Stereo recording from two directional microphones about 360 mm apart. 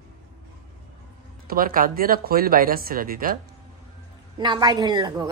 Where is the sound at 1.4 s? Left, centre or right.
Right.